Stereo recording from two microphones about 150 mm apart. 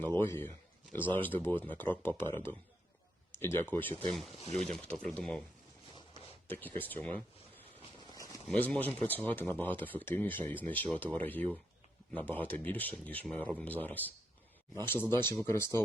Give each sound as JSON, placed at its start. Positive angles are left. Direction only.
{"t": 0.2, "sound": "speech", "side_deg": 15}
{"t": 4.1, "sound": "speech", "side_deg": 0}
{"t": 6.5, "sound": "speech", "side_deg": 10}
{"t": 8.5, "sound": "speech", "side_deg": 10}